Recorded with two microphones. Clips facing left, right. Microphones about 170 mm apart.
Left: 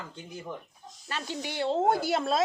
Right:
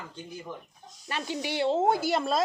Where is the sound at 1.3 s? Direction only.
5° right (ahead or behind).